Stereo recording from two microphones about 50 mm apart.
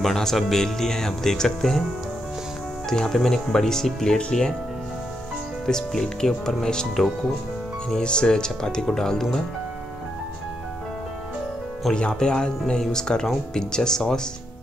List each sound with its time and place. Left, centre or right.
0.0 s speech: centre
2.9 s speech: centre
5.7 s speech: centre
11.9 s speech: centre